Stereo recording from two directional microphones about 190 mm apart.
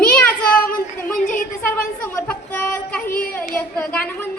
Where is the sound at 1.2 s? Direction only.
45° left (ahead or behind).